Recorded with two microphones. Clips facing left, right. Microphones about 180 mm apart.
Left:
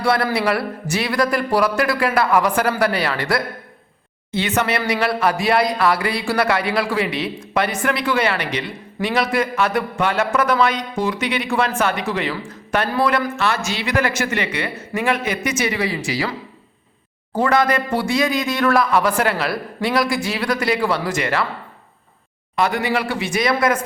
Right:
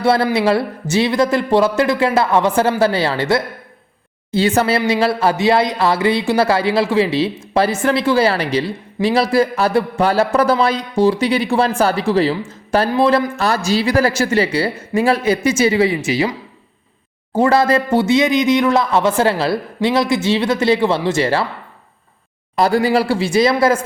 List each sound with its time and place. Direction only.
0.0 s speech: 25° right (ahead or behind)
17.3 s speech: 25° right (ahead or behind)
22.5 s speech: 35° right (ahead or behind)